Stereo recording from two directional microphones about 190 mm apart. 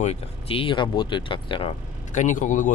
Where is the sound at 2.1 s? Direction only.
40° left (ahead or behind).